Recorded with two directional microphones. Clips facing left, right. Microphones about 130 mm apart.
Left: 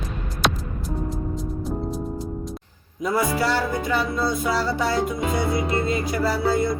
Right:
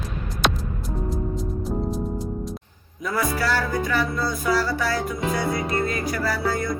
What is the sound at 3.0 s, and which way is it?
Music, 25° left (ahead or behind).